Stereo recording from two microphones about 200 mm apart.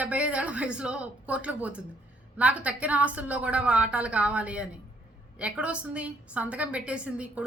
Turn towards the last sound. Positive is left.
turn(degrees=-5)  # may be behind; listen again after turning